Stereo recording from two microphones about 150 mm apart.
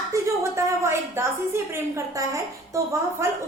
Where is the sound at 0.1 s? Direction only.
20° right (ahead or behind).